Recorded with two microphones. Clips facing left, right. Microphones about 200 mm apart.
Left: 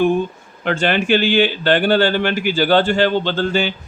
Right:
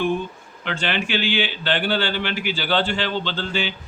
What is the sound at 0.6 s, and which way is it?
A man's voice, 45° left (ahead or behind).